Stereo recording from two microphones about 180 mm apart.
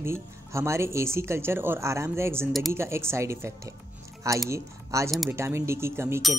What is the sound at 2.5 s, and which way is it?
Speech, centre (ahead or behind).